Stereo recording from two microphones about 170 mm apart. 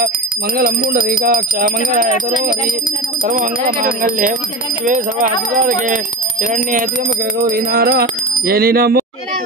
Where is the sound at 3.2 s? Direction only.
55° right (ahead or behind).